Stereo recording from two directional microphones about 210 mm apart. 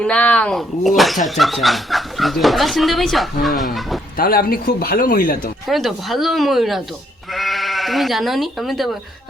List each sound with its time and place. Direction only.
0.0 s speech: 5° left (ahead or behind)
4.2 s speech: 45° left (ahead or behind)
5.6 s speech: centre (ahead or behind)
7.3 s sheep: centre (ahead or behind)